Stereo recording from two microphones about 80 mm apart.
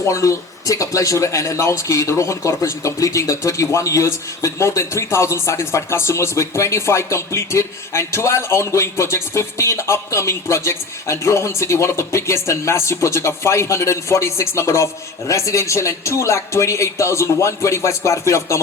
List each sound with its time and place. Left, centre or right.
0.0 s speech: left